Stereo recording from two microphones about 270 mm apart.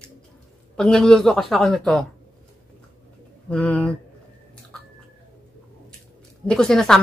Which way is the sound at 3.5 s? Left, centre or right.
Centre.